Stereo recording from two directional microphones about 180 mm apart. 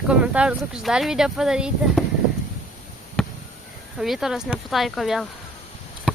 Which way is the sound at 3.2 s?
5° left (ahead or behind).